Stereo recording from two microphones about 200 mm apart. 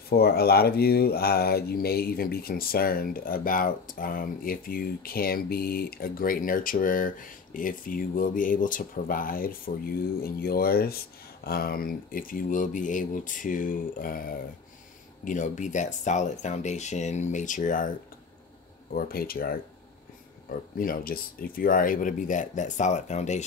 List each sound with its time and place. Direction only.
0.1 s speech: 50° left (ahead or behind)
18.9 s speech: 50° left (ahead or behind)